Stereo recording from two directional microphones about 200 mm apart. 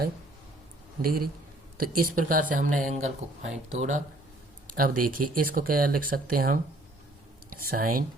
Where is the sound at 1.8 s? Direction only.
45° right (ahead or behind).